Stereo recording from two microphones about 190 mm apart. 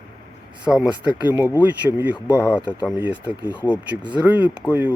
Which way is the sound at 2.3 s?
15° left (ahead or behind).